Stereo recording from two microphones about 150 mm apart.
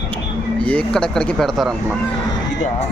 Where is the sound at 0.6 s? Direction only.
5° left (ahead or behind).